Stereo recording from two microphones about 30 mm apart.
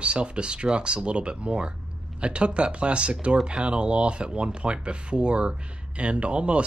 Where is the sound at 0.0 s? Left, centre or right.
Right.